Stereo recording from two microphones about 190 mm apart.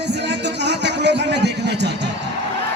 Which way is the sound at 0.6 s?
65° right (ahead or behind).